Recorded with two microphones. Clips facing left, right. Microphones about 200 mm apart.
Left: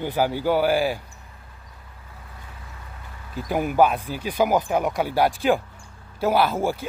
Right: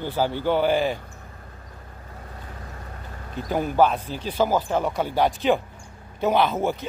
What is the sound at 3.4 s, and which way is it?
Speech, 10° left (ahead or behind).